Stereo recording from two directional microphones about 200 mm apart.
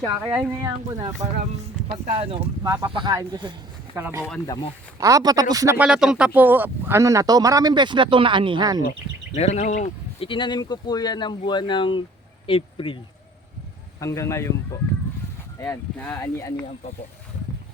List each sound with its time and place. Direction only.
0.3 s speech: 15° right (ahead or behind)
2.0 s speech: 30° right (ahead or behind)
2.6 s speech: 20° right (ahead or behind)
4.4 s speech: 20° left (ahead or behind)
4.9 s speech: 15° right (ahead or behind)
8.8 s speech: 40° left (ahead or behind)
14.0 s speech: 15° left (ahead or behind)